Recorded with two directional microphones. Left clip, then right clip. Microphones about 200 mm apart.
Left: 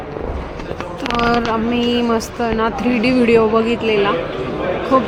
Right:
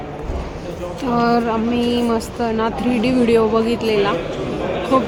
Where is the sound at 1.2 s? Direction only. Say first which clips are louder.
Left 1 dB; 5° right (ahead or behind).